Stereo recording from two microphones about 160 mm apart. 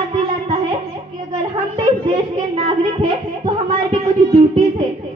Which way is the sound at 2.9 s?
30° right (ahead or behind).